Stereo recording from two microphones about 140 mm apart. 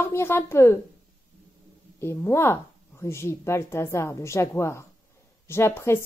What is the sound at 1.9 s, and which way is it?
A woman's voice, 15° left (ahead or behind).